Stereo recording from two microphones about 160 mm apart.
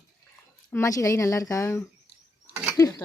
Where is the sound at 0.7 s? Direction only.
20° left (ahead or behind).